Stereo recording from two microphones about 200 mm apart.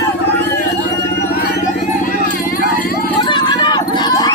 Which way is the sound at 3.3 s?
20° left (ahead or behind).